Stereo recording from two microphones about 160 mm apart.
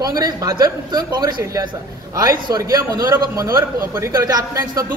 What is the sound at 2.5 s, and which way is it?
A man's voice, 25° right (ahead or behind).